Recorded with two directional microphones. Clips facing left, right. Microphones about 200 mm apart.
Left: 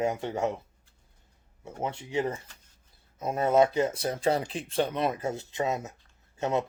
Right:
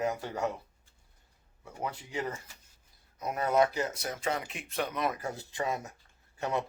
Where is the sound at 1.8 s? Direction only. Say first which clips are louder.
Left 6 dB; 25° left (ahead or behind).